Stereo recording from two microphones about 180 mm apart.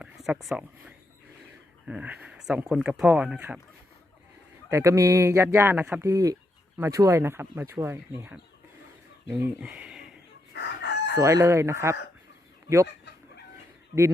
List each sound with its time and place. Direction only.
0.4 s speech: 5° right (ahead or behind)
4.7 s speech: 15° right (ahead or behind)
10.5 s chicken: 70° left (ahead or behind)
11.2 s speech: 15° right (ahead or behind)